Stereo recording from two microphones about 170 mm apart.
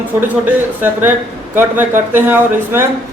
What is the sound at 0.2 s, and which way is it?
A man's voice, 10° right (ahead or behind).